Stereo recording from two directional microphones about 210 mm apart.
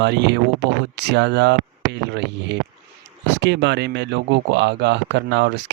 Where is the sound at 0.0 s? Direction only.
55° right (ahead or behind).